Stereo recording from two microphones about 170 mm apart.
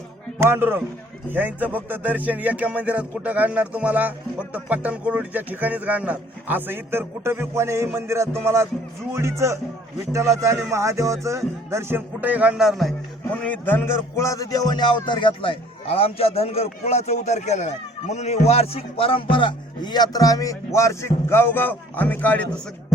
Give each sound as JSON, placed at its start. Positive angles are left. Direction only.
{"t": 0.3, "sound": "speech", "side_deg": -10}
{"t": 13.4, "sound": "speech", "side_deg": 10}